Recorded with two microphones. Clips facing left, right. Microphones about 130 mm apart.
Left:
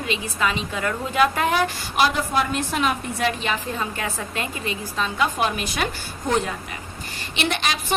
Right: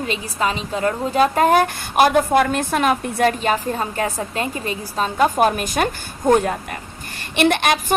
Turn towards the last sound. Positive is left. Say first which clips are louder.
# right 7 dB
turn(degrees=-55)  # may be behind; listen again after turning